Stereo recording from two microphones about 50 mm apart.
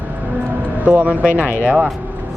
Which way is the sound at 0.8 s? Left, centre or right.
Right.